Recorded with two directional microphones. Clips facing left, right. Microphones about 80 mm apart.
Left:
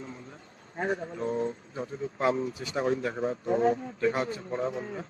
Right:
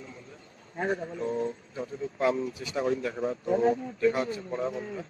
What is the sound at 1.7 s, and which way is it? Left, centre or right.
Speech, left.